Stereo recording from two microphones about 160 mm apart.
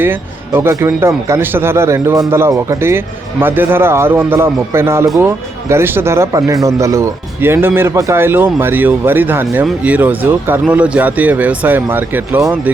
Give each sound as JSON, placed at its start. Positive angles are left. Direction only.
{"t": 0.0, "sound": "speech", "side_deg": -15}